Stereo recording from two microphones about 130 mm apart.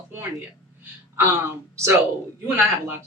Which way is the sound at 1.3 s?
20° right (ahead or behind).